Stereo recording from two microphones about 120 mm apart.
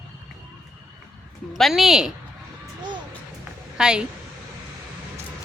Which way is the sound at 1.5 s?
Centre (ahead or behind).